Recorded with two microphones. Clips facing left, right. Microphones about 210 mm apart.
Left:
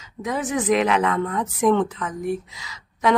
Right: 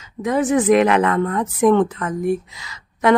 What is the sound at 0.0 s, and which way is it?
Speech, 50° right (ahead or behind).